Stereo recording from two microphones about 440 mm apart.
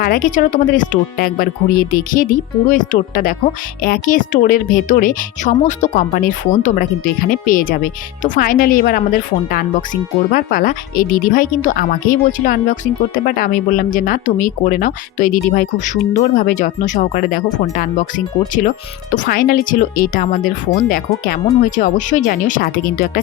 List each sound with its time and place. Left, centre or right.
0.0 s a woman's voice: centre
19.1 s a woman's voice: centre